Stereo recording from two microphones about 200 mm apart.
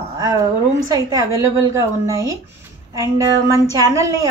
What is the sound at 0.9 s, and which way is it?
A woman's voice, 15° right (ahead or behind).